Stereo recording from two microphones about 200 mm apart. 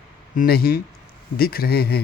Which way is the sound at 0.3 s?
50° left (ahead or behind).